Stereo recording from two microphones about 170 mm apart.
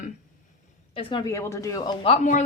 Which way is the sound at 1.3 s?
15° left (ahead or behind).